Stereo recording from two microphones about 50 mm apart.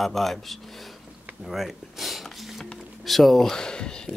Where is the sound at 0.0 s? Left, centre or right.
Centre.